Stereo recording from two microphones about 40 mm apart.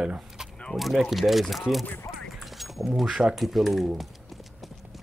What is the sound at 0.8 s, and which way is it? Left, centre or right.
Speech, centre.